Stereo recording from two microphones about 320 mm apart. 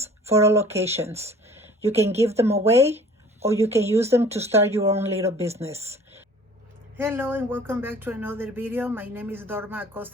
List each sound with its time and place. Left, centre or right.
0.3 s speech: centre
1.5 s a sound: centre
1.9 s speech: centre
2.3 s speech: centre
2.6 s speech: centre
3.4 s speech: centre
5.4 s speech: centre
5.9 s a sound: centre
6.9 s speech: centre